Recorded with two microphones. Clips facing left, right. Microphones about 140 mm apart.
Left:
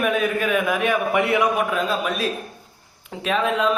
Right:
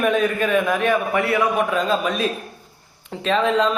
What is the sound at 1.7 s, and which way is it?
A man's voice, centre (ahead or behind).